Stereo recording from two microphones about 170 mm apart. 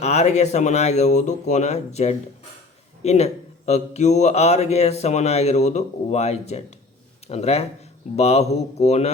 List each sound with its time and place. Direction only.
0.0 s a man's voice: 40° left (ahead or behind)